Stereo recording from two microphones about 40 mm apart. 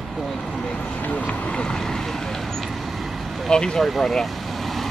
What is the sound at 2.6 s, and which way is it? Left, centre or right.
Vehicle, centre.